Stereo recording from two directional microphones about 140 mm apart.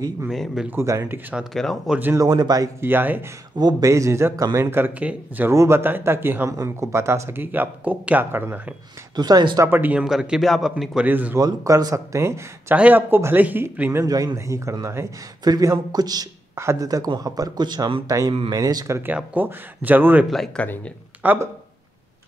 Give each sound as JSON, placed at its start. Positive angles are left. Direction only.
{"t": 0.3, "sound": "a man's voice", "side_deg": 0}
{"t": 0.7, "sound": "speech", "side_deg": -20}
{"t": 1.4, "sound": "a man's voice", "side_deg": 0}
{"t": 2.0, "sound": "speech", "side_deg": -15}
{"t": 2.2, "sound": "a man's voice", "side_deg": -25}
{"t": 2.9, "sound": "speech", "side_deg": -15}
{"t": 3.5, "sound": "a man's voice", "side_deg": -25}
{"t": 9.1, "sound": "a man's voice", "side_deg": -30}
{"t": 9.7, "sound": "a man's voice", "side_deg": -15}
{"t": 11.1, "sound": "speech", "side_deg": -15}
{"t": 11.3, "sound": "a man's voice", "side_deg": -25}
{"t": 20.2, "sound": "a man's voice", "side_deg": 0}
{"t": 20.6, "sound": "speech", "side_deg": 10}
{"t": 21.2, "sound": "speech", "side_deg": -15}